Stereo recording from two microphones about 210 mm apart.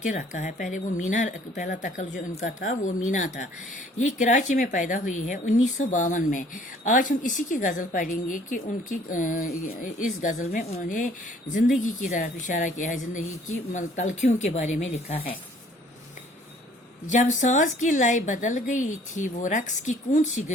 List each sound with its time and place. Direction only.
0.0 s a woman's voice: 35° left (ahead or behind)
17.1 s a woman's voice: 35° left (ahead or behind)